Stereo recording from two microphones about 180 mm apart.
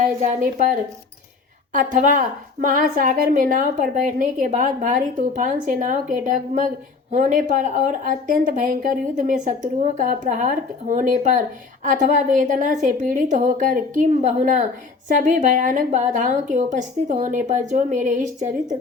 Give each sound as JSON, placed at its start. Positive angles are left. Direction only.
{"t": 0.0, "sound": "a woman's voice", "side_deg": -50}